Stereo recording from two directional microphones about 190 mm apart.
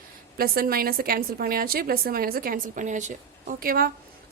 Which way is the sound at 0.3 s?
50° right (ahead or behind).